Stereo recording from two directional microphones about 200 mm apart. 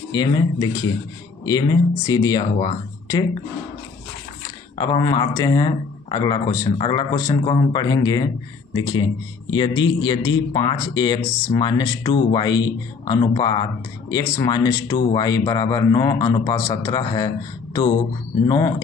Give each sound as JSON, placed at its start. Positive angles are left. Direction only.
{"t": 0.1, "sound": "speech", "side_deg": 20}
{"t": 4.8, "sound": "speech", "side_deg": 20}
{"t": 18.4, "sound": "speech", "side_deg": 20}